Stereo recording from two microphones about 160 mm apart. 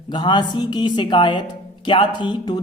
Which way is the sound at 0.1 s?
30° left (ahead or behind).